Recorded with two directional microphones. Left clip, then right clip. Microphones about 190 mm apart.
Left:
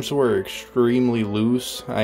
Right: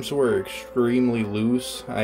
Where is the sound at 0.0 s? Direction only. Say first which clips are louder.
Left 2 dB; 25° left (ahead or behind).